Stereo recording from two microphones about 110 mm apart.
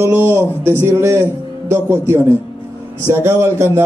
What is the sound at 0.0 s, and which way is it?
A man's voice, 25° right (ahead or behind).